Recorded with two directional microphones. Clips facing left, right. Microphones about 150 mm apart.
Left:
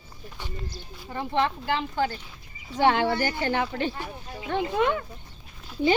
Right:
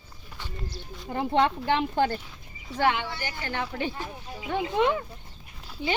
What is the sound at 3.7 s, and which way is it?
Speech, 10° right (ahead or behind).